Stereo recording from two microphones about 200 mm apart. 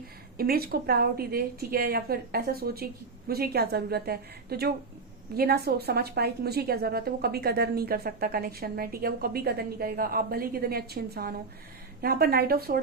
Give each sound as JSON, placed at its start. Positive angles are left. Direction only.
{"t": 0.3, "sound": "a woman's voice", "side_deg": -50}